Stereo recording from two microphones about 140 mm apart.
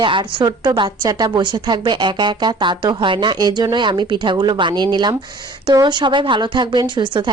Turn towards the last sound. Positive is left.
turn(degrees=-35)  # may be behind; listen again after turning